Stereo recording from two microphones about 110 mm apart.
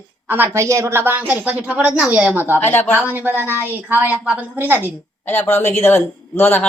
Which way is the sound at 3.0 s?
20° right (ahead or behind).